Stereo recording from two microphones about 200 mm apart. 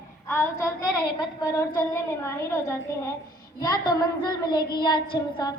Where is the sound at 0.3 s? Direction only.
15° left (ahead or behind).